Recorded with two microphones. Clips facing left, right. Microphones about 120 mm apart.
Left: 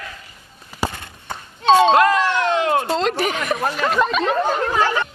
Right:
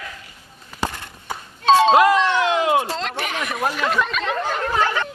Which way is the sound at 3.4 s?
5° right (ahead or behind).